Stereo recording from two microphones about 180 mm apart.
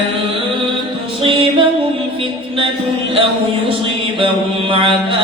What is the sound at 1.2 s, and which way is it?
Music, 30° right (ahead or behind).